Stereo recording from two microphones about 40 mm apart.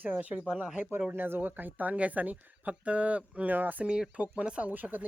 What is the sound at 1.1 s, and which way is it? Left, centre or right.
Speech, right.